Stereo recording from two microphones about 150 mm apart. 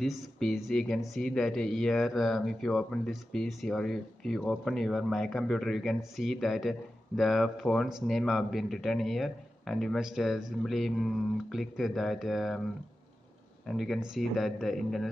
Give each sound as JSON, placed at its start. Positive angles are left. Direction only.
{"t": 0.0, "sound": "speech", "side_deg": 0}
{"t": 13.7, "sound": "speech", "side_deg": 0}